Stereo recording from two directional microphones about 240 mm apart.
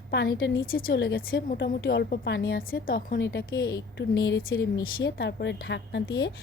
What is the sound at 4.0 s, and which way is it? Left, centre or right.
A woman's voice, left.